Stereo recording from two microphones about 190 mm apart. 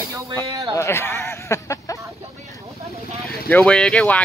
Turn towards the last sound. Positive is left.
turn(degrees=5)  # may be behind; listen again after turning